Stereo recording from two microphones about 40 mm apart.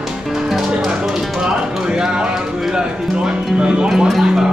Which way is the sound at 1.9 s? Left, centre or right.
Centre.